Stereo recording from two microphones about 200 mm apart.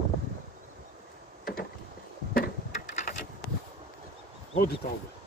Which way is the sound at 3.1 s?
45° left (ahead or behind).